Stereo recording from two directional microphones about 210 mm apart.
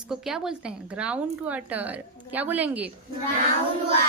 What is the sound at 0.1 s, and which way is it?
A woman's voice, centre (ahead or behind).